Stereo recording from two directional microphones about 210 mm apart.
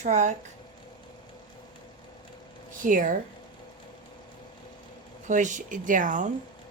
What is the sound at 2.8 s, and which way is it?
Speech, 40° right (ahead or behind).